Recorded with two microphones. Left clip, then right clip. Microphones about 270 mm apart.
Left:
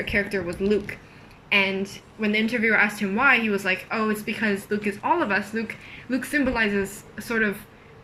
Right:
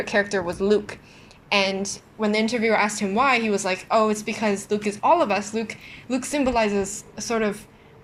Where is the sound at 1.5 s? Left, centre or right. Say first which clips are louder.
Even; centre.